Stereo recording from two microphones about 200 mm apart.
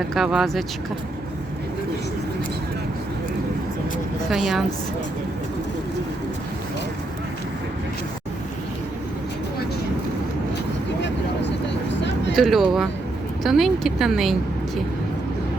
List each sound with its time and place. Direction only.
0.1 s speech: centre (ahead or behind)
4.3 s speech: centre (ahead or behind)
11.0 s vehicle: 60° left (ahead or behind)
12.4 s speech: centre (ahead or behind)